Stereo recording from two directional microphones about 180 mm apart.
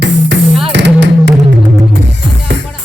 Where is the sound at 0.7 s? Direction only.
75° right (ahead or behind).